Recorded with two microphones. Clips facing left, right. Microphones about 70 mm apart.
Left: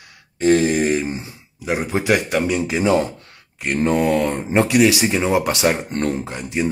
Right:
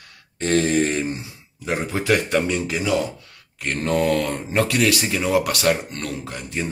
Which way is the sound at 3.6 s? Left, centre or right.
Centre.